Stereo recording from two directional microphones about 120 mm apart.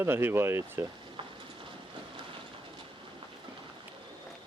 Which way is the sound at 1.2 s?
45° right (ahead or behind).